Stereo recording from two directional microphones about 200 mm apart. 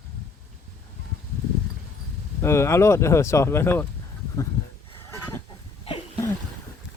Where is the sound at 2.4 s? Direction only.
15° left (ahead or behind).